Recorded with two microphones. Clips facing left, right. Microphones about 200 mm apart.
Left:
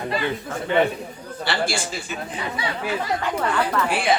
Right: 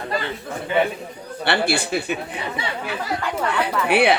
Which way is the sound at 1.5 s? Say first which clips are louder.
Right 4 dB; 60° right (ahead or behind).